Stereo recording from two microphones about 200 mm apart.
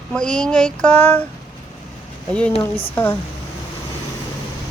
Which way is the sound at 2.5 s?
30° left (ahead or behind).